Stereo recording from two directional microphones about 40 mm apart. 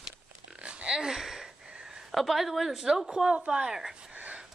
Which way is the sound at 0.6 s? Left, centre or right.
Right.